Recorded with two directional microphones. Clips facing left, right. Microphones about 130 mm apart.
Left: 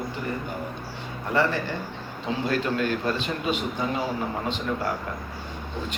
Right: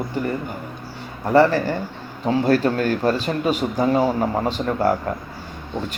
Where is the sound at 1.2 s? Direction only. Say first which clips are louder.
Right 9 dB; 40° right (ahead or behind).